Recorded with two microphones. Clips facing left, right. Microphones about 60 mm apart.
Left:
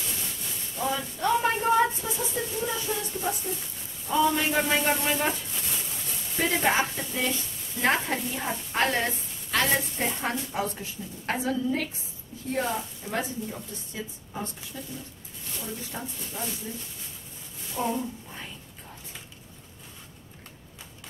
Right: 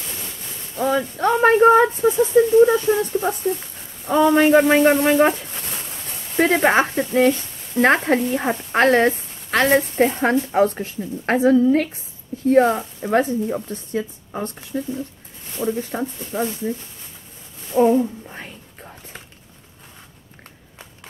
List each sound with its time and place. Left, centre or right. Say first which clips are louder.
0.7 s speech: right 9 dB; right
17.7 s speech: right 13 dB; right